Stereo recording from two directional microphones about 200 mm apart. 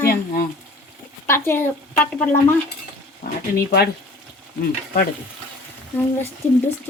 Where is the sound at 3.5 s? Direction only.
50° left (ahead or behind).